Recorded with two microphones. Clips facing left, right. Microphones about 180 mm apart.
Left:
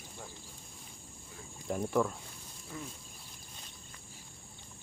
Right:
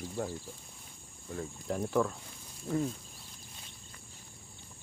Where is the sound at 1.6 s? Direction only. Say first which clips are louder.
Even; centre (ahead or behind).